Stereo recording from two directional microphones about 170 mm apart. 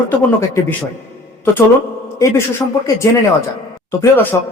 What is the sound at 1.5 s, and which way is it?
A man's voice, 15° left (ahead or behind).